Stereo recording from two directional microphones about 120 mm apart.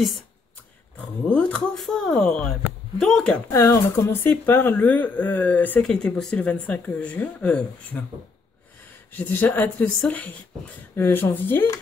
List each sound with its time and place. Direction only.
1.2 s speech: 10° left (ahead or behind)
3.4 s speech: 25° left (ahead or behind)
9.1 s speech: 15° left (ahead or behind)